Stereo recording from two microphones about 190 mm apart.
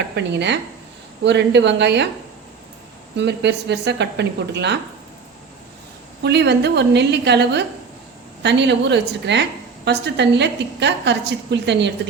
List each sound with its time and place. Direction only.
0.2 s a woman's voice: 65° right (ahead or behind)
3.2 s a woman's voice: 65° right (ahead or behind)
6.2 s a woman's voice: 60° right (ahead or behind)